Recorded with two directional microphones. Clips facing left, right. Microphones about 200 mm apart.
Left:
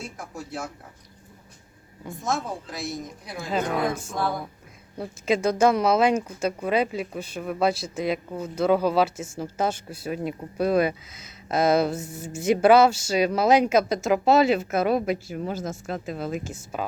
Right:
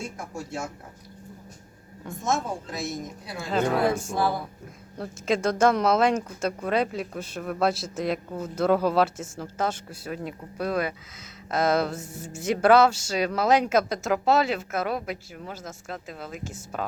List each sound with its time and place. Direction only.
0.0 s a woman's voice: centre (ahead or behind)
2.0 s a woman's voice: centre (ahead or behind)
4.2 s a woman's voice: 5° right (ahead or behind)
11.9 s speech: 20° left (ahead or behind)